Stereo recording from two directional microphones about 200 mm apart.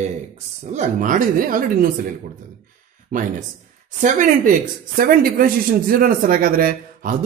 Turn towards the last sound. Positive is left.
turn(degrees=-45)  # may be behind; listen again after turning